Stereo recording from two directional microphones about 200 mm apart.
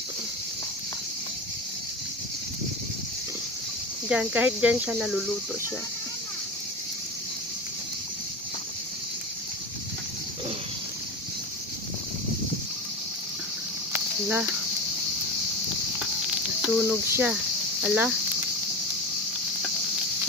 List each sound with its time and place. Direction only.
4.1 s speech: 5° right (ahead or behind)
13.9 s cricket: 10° right (ahead or behind)
16.6 s speech: 5° right (ahead or behind)